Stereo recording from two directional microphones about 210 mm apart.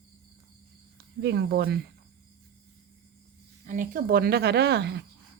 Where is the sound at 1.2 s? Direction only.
50° right (ahead or behind).